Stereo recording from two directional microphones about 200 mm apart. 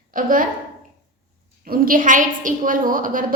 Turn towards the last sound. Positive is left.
turn(degrees=-45)  # may be behind; listen again after turning